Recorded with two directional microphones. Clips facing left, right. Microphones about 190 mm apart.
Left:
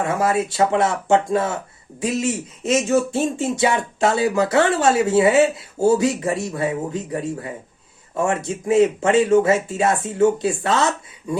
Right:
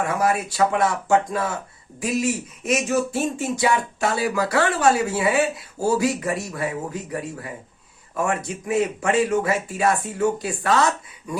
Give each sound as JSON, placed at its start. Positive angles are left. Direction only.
{"t": 0.0, "sound": "speech", "side_deg": 25}